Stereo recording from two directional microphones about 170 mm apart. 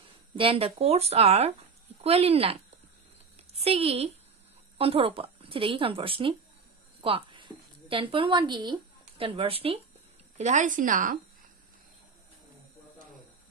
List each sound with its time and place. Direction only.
0.4 s speech: 35° right (ahead or behind)
7.0 s a sound: 30° right (ahead or behind)
9.3 s a woman's voice: 35° right (ahead or behind); by 11.1 s 50° right (ahead or behind)